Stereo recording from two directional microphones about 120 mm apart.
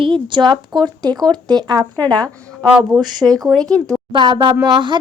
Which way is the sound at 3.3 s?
5° left (ahead or behind).